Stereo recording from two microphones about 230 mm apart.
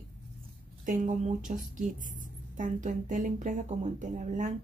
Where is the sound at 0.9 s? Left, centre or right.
Right.